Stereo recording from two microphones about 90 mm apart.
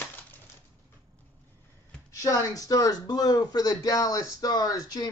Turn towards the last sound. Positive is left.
turn(degrees=45)  # may be behind; listen again after turning